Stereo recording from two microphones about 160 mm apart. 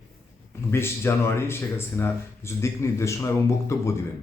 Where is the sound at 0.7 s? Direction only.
15° left (ahead or behind).